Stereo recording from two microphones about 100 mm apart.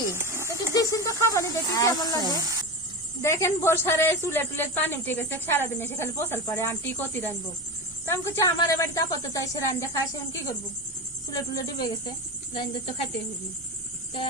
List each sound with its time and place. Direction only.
0.2 s a sound: 25° right (ahead or behind)
0.7 s a sound: 35° left (ahead or behind)
1.3 s a woman's voice: 35° left (ahead or behind)
2.4 s speech: 40° right (ahead or behind)
3.2 s a woman's voice: 25° left (ahead or behind)
12.5 s speech: 70° left (ahead or behind)